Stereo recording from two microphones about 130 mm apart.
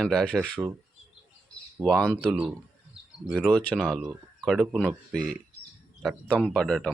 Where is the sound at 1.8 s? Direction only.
5° left (ahead or behind).